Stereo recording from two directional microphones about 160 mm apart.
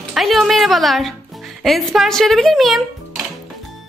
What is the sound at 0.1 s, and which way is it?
A woman's voice, centre (ahead or behind).